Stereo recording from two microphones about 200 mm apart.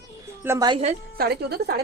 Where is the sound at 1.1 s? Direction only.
50° right (ahead or behind).